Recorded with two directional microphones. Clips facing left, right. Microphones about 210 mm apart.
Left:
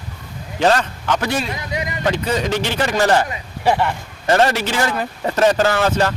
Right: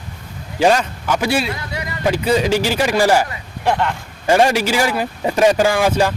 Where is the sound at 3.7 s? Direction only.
10° left (ahead or behind).